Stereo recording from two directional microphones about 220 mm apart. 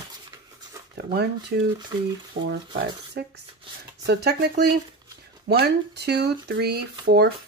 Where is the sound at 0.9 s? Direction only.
45° right (ahead or behind).